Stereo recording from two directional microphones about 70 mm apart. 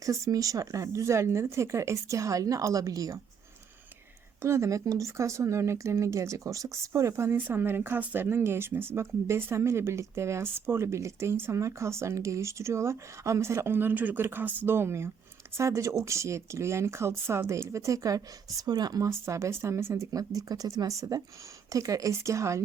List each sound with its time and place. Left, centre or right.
0.0 s speech: right
4.4 s speech: right
7.3 s speech: right
13.7 s speech: right
18.6 s speech: right
19.3 s speech: right